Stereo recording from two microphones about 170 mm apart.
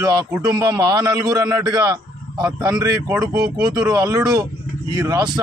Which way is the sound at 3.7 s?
20° right (ahead or behind).